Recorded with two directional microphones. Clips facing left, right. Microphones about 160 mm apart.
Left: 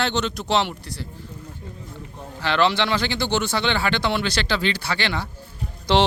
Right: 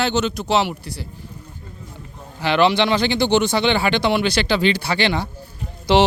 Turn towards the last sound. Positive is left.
turn(degrees=-10)  # may be behind; listen again after turning